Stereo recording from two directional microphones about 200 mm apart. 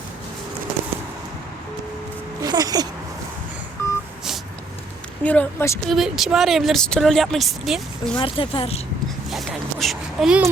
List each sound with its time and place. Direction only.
2.4 s speech: 20° right (ahead or behind)
3.8 s telephone dialing: 15° left (ahead or behind)
5.2 s speech: 5° left (ahead or behind)
5.9 s speech: centre (ahead or behind)
8.2 s speech: 25° left (ahead or behind)
9.3 s a sound: centre (ahead or behind)